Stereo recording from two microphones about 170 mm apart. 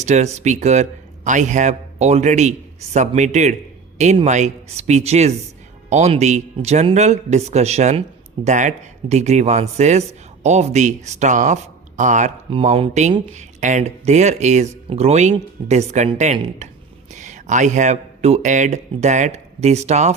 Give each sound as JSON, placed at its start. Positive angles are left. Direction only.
{"t": 0.0, "sound": "speech", "side_deg": -40}